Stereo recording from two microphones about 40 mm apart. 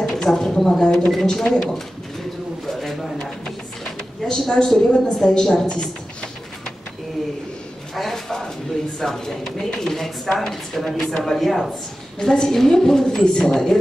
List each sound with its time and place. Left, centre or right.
0.2 s a woman's voice: centre
1.2 s speech: left
2.6 s a sound: centre
4.2 s a woman's voice: centre
7.9 s a woman's voice: centre
12.2 s a woman's voice: centre